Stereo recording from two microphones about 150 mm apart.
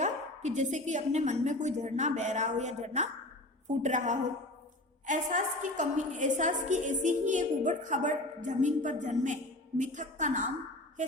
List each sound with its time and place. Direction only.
0.0 s a woman's voice: 50° right (ahead or behind)